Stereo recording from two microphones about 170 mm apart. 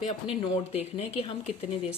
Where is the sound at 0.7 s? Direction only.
35° left (ahead or behind).